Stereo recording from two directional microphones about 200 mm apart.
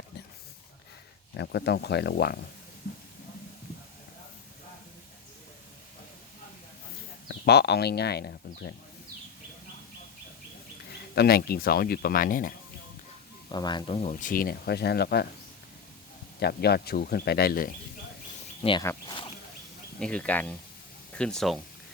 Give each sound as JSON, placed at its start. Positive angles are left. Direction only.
{"t": 1.3, "sound": "speech", "side_deg": 60}
{"t": 7.3, "sound": "speech", "side_deg": 55}
{"t": 11.1, "sound": "speech", "side_deg": 50}
{"t": 13.5, "sound": "speech", "side_deg": 20}
{"t": 16.4, "sound": "speech", "side_deg": 55}
{"t": 18.6, "sound": "speech", "side_deg": 25}
{"t": 18.9, "sound": "a sound", "side_deg": 20}
{"t": 20.0, "sound": "speech", "side_deg": 5}